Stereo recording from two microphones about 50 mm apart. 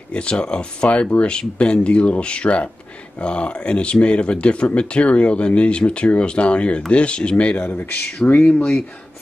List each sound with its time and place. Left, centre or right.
0.1 s speech: left
8.3 s speech: left